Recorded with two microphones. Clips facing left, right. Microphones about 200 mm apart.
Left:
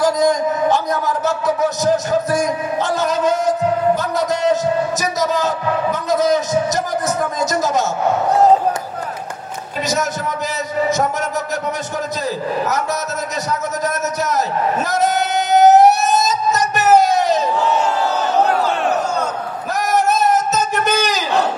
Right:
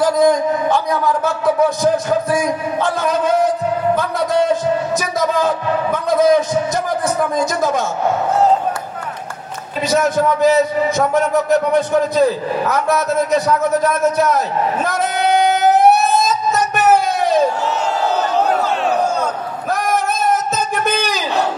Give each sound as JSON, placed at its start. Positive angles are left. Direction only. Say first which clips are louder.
{"t": 0.2, "sound": "a man's voice", "louder": "right 2 dB", "side_deg": -55}
{"t": 3.9, "sound": "music", "louder": "right 1 dB", "side_deg": -55}
{"t": 7.3, "sound": "a man's voice", "louder": "right 1 dB", "side_deg": -55}
{"t": 9.8, "sound": "a man's voice", "louder": "right 7 dB", "side_deg": -55}
{"t": 19.7, "sound": "a sound", "louder": "left 2 dB", "side_deg": -50}